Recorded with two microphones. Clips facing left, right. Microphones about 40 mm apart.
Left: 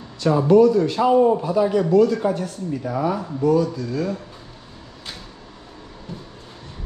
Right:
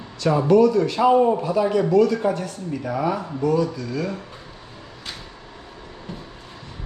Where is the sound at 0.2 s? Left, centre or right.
Right.